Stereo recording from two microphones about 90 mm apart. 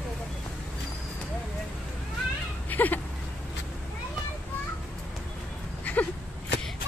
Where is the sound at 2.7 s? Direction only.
20° left (ahead or behind).